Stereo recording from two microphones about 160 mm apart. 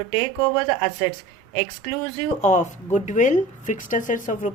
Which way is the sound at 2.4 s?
50° left (ahead or behind).